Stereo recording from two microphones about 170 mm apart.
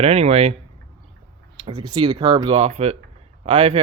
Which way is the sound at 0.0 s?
40° right (ahead or behind).